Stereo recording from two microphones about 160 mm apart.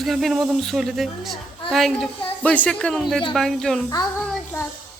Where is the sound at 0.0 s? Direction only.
Centre (ahead or behind).